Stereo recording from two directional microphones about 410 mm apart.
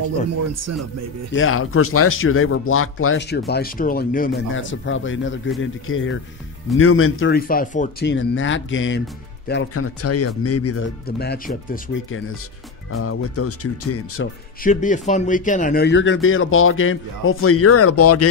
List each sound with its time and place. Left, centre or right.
0.5 s a man's voice: right
1.3 s speech: left
14.6 s speech: centre; by 18.2 s left